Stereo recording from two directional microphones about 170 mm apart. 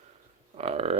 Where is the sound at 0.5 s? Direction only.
35° right (ahead or behind).